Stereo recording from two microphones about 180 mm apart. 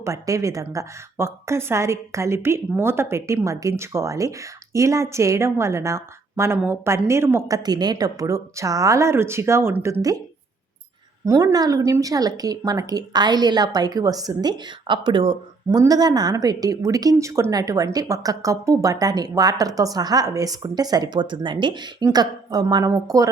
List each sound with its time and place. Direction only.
0.0 s a woman's voice: 15° right (ahead or behind)
11.3 s a woman's voice: 20° right (ahead or behind)